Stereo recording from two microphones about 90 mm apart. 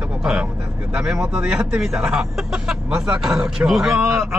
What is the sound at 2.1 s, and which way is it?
Vehicle, 5° right (ahead or behind).